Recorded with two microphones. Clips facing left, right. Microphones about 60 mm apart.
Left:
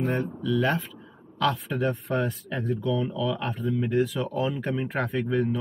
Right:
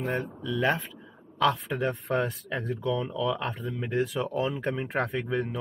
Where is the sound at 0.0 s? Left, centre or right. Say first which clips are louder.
Left 3 dB; centre.